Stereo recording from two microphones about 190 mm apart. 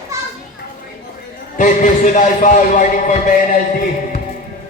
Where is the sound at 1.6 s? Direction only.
40° left (ahead or behind).